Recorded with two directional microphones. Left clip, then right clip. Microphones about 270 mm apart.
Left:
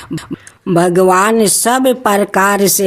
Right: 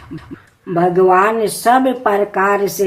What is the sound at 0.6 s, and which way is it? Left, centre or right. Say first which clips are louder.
Speech: left 2 dB; left.